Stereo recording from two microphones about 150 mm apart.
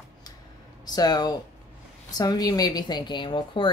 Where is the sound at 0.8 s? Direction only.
25° left (ahead or behind).